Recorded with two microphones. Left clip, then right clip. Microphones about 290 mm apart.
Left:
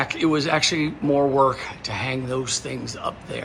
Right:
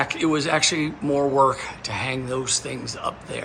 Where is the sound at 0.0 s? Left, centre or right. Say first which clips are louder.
Left 1 dB; centre.